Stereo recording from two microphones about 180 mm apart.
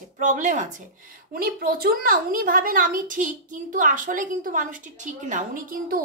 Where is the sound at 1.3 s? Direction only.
55° right (ahead or behind).